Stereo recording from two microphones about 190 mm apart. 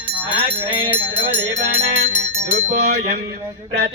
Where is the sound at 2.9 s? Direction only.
55° right (ahead or behind).